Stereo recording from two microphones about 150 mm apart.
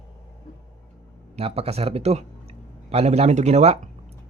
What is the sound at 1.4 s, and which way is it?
Speech, 40° right (ahead or behind).